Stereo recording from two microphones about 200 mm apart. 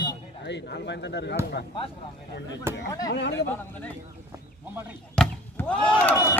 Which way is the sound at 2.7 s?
10° right (ahead or behind).